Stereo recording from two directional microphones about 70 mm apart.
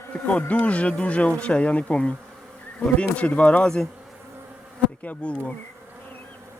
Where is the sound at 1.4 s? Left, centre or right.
Centre.